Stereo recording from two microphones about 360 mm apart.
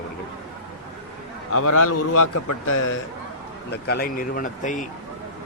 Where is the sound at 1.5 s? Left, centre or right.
Left.